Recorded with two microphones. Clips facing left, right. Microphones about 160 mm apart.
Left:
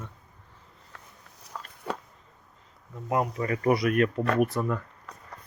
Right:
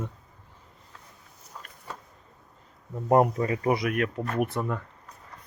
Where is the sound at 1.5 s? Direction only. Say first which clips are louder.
Left 4 dB; 90° left.